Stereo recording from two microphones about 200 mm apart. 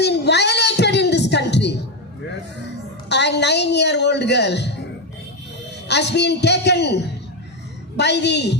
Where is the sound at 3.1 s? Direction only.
60° left (ahead or behind).